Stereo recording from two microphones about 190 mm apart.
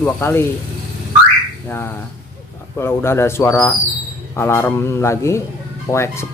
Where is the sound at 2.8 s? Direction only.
15° left (ahead or behind).